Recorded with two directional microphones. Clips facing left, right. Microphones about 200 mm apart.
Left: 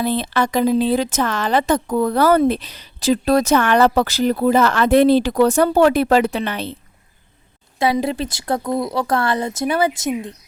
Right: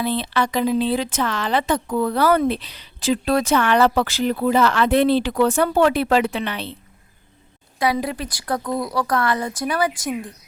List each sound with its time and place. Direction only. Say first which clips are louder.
0.0 s speech: left 2 dB; 45° left (ahead or behind)
7.8 s a woman's voice: left 3 dB; 25° left (ahead or behind)